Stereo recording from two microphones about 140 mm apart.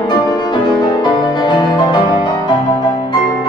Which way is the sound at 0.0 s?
30° left (ahead or behind).